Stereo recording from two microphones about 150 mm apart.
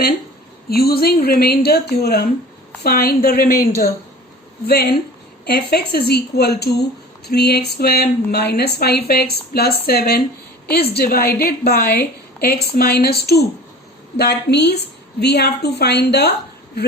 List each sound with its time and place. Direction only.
0.7 s a woman's voice: 90° left